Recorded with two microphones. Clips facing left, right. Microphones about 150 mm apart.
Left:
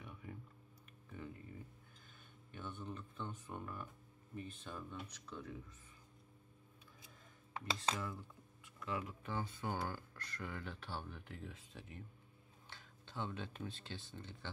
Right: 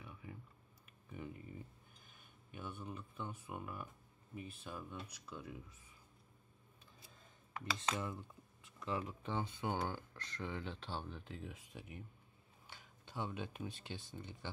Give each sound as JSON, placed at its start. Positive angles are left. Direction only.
{"t": 0.1, "sound": "a sound", "side_deg": 0}
{"t": 1.1, "sound": "a sound", "side_deg": -15}
{"t": 2.0, "sound": "speech", "side_deg": -10}
{"t": 8.0, "sound": "speech", "side_deg": -20}
{"t": 9.8, "sound": "speech", "side_deg": 5}
{"t": 10.6, "sound": "speech", "side_deg": -25}